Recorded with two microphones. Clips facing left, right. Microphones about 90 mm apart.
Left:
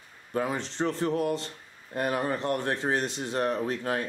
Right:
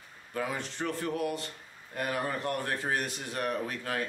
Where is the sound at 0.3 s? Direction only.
30° left (ahead or behind).